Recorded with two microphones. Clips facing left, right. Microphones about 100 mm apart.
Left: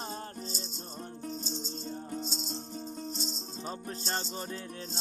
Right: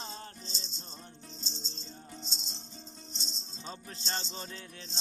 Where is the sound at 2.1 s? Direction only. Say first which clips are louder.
Left 10 dB; 45° left (ahead or behind).